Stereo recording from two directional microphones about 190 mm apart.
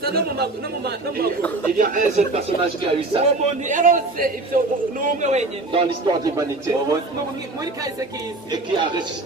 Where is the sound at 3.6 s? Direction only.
45° right (ahead or behind).